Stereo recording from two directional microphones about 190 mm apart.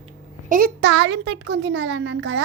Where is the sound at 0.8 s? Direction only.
70° right (ahead or behind).